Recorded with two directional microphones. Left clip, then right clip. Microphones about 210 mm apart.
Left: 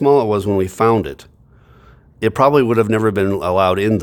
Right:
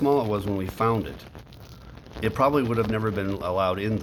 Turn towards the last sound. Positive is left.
turn(degrees=55)  # may be behind; listen again after turning